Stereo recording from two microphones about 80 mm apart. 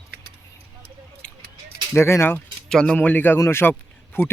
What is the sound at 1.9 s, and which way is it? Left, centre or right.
Speech, left.